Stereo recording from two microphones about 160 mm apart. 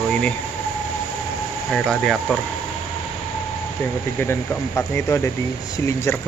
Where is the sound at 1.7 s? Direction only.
Centre (ahead or behind).